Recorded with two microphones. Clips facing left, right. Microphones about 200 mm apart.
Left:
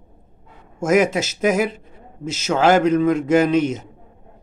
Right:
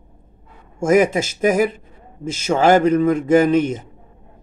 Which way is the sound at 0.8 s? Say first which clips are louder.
Right 2 dB; 10° right (ahead or behind).